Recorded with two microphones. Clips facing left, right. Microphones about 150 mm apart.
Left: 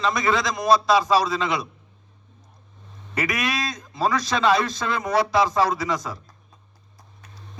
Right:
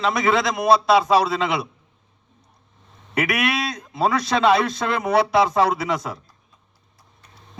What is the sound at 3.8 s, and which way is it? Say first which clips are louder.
Speech: right 2 dB; 25° right (ahead or behind).